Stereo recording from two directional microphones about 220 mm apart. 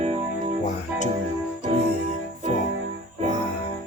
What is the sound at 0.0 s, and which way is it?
Music, 30° right (ahead or behind).